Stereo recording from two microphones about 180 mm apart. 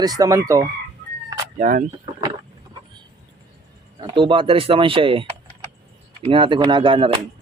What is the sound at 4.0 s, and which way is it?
Speech, 25° right (ahead or behind).